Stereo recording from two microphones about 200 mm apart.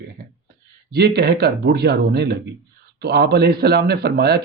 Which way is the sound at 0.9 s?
55° right (ahead or behind).